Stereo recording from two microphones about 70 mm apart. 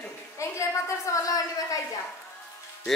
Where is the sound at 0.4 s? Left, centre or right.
Left.